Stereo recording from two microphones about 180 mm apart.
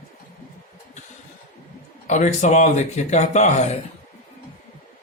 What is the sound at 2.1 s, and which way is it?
Speech, 40° left (ahead or behind).